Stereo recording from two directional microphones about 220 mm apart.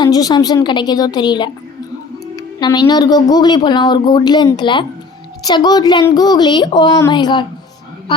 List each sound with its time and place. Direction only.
0.0 s speech: 15° left (ahead or behind)